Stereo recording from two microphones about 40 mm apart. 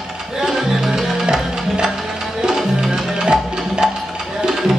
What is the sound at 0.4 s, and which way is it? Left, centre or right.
Music, centre.